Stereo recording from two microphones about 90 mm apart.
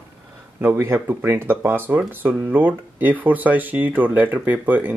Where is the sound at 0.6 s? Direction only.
25° right (ahead or behind).